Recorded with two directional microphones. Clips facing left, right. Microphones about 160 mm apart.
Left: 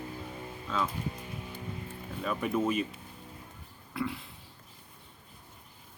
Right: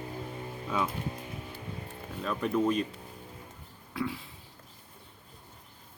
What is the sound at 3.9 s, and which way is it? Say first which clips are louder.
Speech: right 1 dB; centre (ahead or behind).